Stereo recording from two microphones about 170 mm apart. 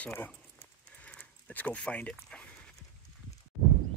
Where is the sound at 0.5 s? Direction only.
10° left (ahead or behind).